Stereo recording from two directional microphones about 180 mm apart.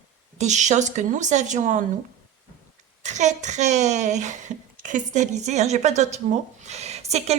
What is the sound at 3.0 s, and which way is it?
Speech, 40° right (ahead or behind).